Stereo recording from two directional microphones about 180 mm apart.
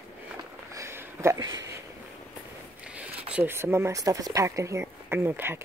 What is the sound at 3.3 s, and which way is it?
Speech, 15° right (ahead or behind).